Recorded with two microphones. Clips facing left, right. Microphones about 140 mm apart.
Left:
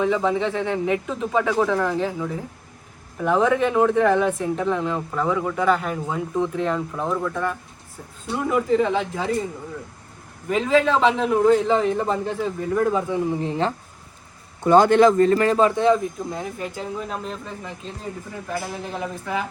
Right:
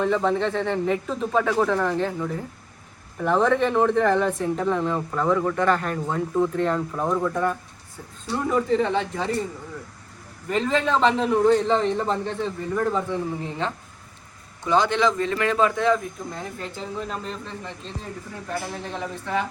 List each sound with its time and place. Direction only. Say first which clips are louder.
0.0 s speech: left 1 dB; centre (ahead or behind)
8.3 s speech: left 1 dB; 5° left (ahead or behind)
10.5 s speech: left 3 dB; 5° left (ahead or behind)
13.4 s a man's voice: left 5 dB; 35° left (ahead or behind)
14.6 s a man's voice: left 7 dB; 50° left (ahead or behind); by 16.0 s 30° left (ahead or behind)
16.3 s speech: left 4 dB; 10° left (ahead or behind)